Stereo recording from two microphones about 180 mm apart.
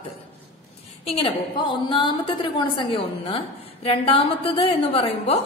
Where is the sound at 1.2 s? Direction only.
30° left (ahead or behind).